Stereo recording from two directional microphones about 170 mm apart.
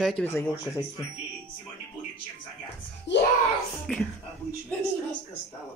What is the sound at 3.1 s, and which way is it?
Speech, 90° left.